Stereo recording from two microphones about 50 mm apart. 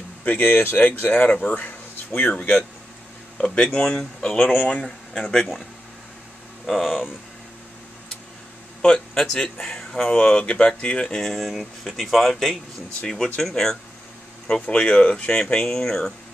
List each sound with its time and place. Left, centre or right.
0.2 s speech: left; by 4.5 s centre
5.1 s speech: left
6.6 s speech: centre
8.8 s speech: centre
11.1 s speech: centre
14.5 s speech: left
15.4 s speech: centre